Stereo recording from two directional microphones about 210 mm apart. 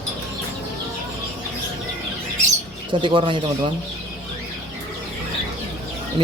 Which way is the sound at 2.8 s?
25° right (ahead or behind).